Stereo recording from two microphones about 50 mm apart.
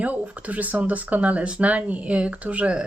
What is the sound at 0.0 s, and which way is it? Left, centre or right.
Speech, right.